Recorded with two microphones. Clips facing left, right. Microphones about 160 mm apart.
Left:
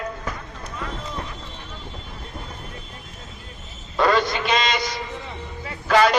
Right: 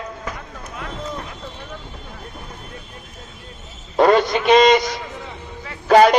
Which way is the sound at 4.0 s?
50° right (ahead or behind).